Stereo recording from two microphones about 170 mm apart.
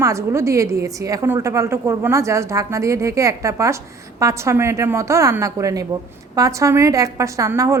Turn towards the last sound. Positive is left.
turn(degrees=-20)  # may be behind; listen again after turning